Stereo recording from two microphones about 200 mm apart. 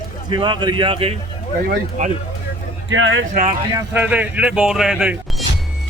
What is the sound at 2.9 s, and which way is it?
Speech, 70° right (ahead or behind).